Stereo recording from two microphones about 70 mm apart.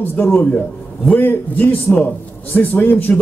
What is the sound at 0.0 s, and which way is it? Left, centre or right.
A man's voice, left.